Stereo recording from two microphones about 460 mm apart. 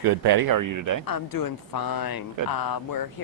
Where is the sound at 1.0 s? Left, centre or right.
Left.